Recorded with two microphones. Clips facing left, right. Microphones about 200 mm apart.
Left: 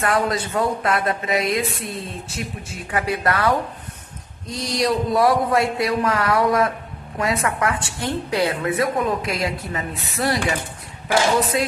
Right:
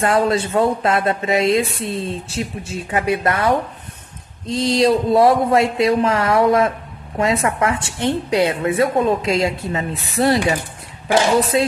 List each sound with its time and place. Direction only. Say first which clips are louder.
0.0 s a woman's voice: right 4 dB; 25° right (ahead or behind)